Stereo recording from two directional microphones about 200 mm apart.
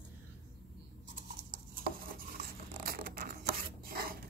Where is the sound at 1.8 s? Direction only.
45° right (ahead or behind).